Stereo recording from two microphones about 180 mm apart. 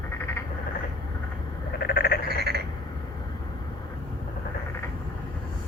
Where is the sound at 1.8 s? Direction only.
60° left (ahead or behind).